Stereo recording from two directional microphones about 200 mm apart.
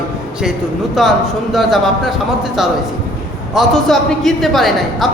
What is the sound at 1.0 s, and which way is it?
A woman's voice, centre (ahead or behind).